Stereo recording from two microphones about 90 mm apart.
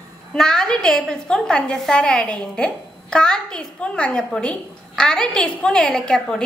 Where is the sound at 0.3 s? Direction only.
5° left (ahead or behind).